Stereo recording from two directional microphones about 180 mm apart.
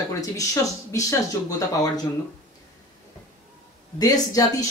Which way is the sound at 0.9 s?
20° left (ahead or behind).